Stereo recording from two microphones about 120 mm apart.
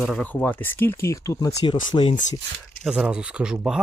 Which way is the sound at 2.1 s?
90° left.